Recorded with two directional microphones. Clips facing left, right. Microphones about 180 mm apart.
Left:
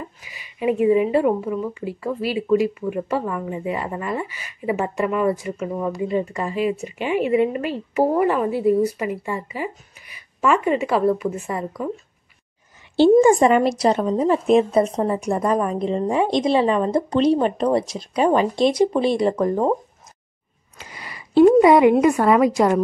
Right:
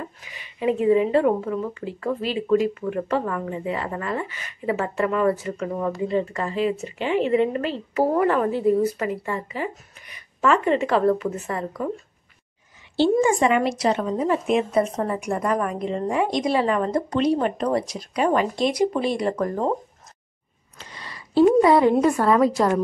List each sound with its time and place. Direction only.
0.0 s speech: 10° left (ahead or behind)
12.9 s a woman's voice: 50° left (ahead or behind); by 19.7 s 15° left (ahead or behind)
21.5 s speech: 15° left (ahead or behind)